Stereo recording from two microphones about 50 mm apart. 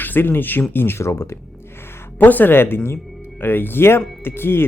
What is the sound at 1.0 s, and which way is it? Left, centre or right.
Speech, left.